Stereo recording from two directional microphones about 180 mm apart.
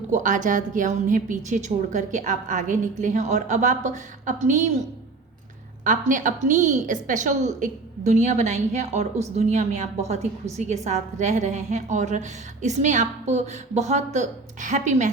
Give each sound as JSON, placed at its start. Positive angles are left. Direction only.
{"t": 0.1, "sound": "a woman's voice", "side_deg": -45}
{"t": 5.8, "sound": "a woman's voice", "side_deg": -45}